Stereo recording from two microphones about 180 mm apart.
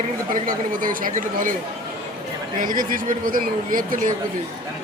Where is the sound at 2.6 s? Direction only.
50° right (ahead or behind).